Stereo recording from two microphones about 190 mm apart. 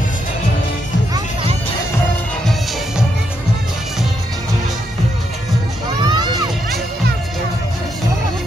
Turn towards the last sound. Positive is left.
turn(degrees=-20)  # may be behind; listen again after turning